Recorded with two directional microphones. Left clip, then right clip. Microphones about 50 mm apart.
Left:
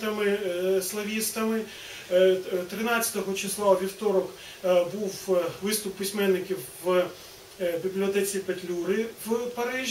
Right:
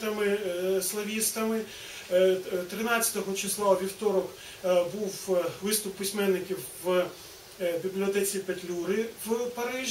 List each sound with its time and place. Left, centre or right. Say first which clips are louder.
0.0 s a sound: left 2 dB; centre
2.1 s speech: left 2 dB; centre
6.8 s speech: left 2 dB; centre
7.6 s speech: left 2 dB; centre